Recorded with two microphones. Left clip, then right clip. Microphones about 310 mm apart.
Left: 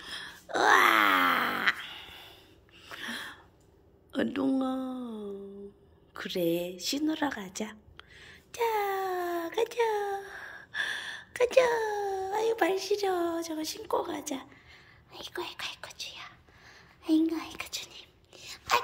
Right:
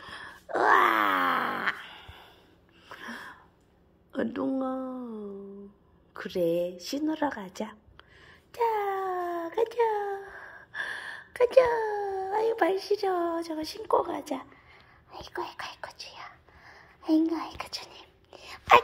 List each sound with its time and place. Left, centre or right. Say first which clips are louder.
0.0 s groan: left 1 dB; centre
2.8 s a sound: left 3 dB; centre
6.1 s speech: right 3 dB; centre
6.8 s a sound: right 1 dB; centre
15.2 s speech: right 1 dB; centre
16.0 s whispering: left 1 dB; centre
17.0 s a child's voice: right 2 dB; centre
17.6 s whispering: even; centre